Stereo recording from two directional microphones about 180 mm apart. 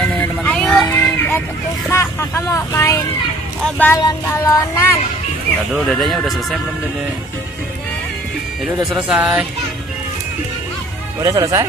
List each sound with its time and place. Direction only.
0.2 s music: 5° left (ahead or behind)
0.9 s a sound: 10° left (ahead or behind)
1.9 s speech: 15° left (ahead or behind)
3.7 s a sound: 10° left (ahead or behind)
5.9 s speech: centre (ahead or behind)
8.9 s speech: 5° right (ahead or behind)
11.2 s speech: 20° right (ahead or behind)